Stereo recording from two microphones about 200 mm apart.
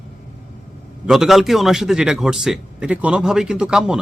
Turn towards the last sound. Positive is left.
turn(degrees=-5)  # may be behind; listen again after turning